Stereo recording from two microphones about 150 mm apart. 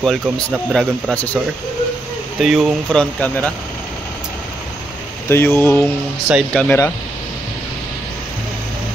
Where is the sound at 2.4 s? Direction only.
Centre (ahead or behind).